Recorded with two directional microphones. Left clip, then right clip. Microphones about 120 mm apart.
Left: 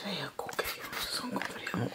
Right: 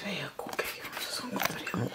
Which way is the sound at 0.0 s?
5° left (ahead or behind).